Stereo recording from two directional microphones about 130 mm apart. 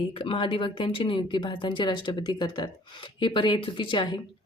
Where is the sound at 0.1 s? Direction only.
40° left (ahead or behind).